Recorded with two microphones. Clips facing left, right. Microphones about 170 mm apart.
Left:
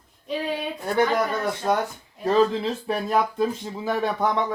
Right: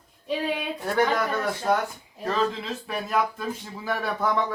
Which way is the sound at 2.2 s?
35° left (ahead or behind).